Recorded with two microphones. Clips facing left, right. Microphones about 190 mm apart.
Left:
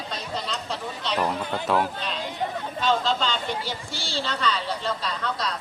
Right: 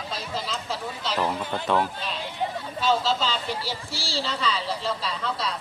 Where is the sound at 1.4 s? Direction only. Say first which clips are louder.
Left 1 dB; 15° left (ahead or behind).